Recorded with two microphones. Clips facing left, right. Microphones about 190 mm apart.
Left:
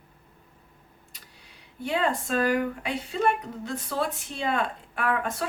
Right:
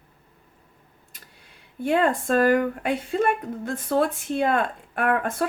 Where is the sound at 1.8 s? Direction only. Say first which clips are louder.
Right 5 dB; 50° right (ahead or behind).